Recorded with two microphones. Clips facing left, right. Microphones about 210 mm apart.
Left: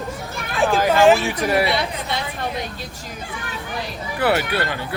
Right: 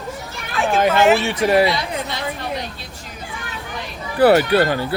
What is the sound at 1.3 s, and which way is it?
Speech, 25° right (ahead or behind).